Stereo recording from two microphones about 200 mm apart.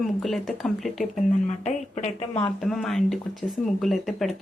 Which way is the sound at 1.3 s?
35° left (ahead or behind).